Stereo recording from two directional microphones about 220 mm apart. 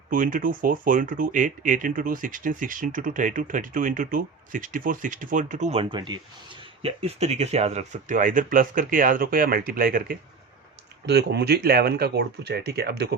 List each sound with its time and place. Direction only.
0.1 s speech: 40° right (ahead or behind)